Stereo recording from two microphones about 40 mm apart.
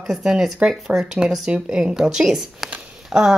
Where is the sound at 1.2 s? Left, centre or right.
Centre.